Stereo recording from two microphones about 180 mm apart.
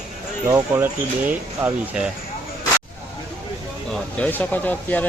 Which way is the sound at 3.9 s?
10° left (ahead or behind).